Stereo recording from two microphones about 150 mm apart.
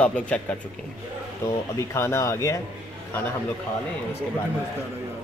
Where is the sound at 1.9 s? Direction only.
20° left (ahead or behind).